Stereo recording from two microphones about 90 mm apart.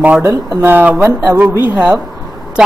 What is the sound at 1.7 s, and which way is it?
Speech, 10° right (ahead or behind).